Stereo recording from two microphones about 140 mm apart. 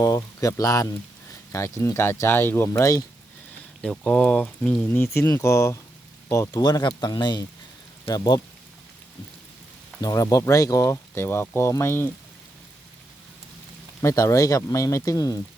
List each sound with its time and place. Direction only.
0.0 s speech: 25° left (ahead or behind)
3.8 s speech: 5° left (ahead or behind)
4.9 s speech: 20° left (ahead or behind)
10.0 s speech: 25° left (ahead or behind)
14.0 s speech: 20° left (ahead or behind)